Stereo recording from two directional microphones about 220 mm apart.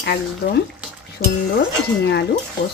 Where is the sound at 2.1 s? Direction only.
50° left (ahead or behind).